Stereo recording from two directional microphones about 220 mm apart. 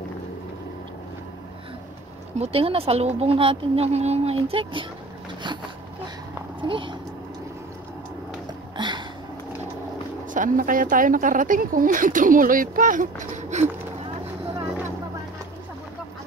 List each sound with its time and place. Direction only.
2.3 s speech: 25° right (ahead or behind)
6.6 s speech: 20° right (ahead or behind)
8.7 s a sound: 20° right (ahead or behind)
10.3 s speech: 35° right (ahead or behind)